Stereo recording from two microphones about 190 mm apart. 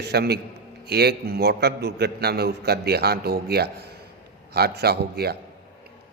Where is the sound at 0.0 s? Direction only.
60° right (ahead or behind).